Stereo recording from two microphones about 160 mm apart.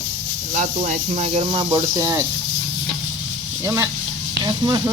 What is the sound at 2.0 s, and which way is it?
Speech, 15° right (ahead or behind).